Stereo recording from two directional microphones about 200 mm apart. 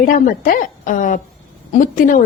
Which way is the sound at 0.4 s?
40° left (ahead or behind).